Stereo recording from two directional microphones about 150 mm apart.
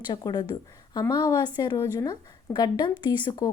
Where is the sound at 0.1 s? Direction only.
30° left (ahead or behind).